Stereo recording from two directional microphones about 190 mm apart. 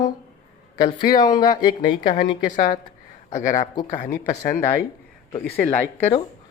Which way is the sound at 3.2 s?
40° left (ahead or behind).